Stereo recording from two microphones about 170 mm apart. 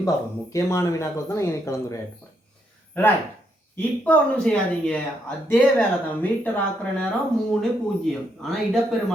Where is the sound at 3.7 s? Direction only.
10° left (ahead or behind).